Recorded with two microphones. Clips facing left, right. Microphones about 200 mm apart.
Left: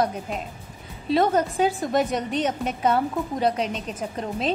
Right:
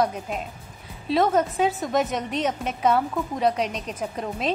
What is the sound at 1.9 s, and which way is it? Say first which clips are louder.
Speech: left 1 dB; 30° left (ahead or behind).